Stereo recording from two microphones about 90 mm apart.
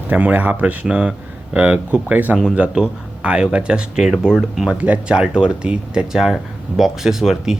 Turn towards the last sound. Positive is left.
turn(degrees=-5)  # may be behind; listen again after turning